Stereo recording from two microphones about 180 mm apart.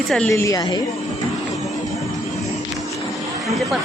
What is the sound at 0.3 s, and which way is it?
Speech, 15° left (ahead or behind).